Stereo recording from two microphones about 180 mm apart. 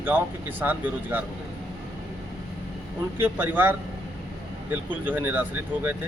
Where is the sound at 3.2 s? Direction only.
10° right (ahead or behind).